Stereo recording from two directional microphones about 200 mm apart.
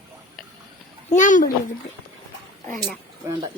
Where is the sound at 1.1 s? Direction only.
40° left (ahead or behind).